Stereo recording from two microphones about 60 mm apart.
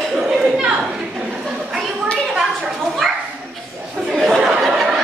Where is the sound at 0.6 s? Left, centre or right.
Centre.